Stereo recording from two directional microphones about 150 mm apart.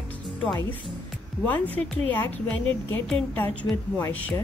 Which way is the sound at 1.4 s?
10° left (ahead or behind).